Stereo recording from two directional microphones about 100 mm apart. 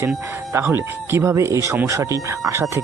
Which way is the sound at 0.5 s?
20° right (ahead or behind).